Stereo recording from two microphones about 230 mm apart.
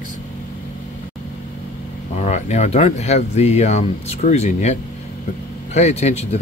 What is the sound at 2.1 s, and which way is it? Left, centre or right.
Speech, left.